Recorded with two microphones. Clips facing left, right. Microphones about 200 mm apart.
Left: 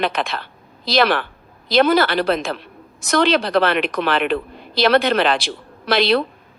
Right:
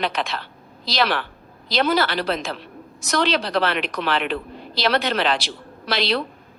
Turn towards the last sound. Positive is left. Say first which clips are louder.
# left 6 dB
turn(degrees=55)  # may be behind; listen again after turning